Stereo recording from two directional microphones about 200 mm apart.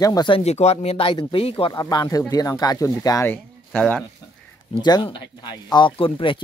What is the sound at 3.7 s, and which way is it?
Speech, 5° left (ahead or behind).